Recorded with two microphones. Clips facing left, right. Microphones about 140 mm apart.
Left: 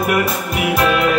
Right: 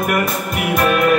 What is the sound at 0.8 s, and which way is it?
Music, 50° right (ahead or behind).